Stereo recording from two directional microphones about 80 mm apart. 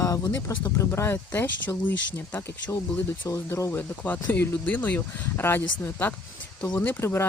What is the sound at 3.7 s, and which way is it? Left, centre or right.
Speech, left.